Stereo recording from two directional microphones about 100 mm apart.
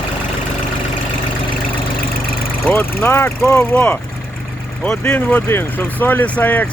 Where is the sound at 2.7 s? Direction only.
25° left (ahead or behind).